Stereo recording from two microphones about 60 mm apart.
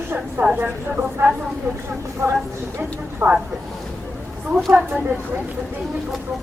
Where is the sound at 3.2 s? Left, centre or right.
Right.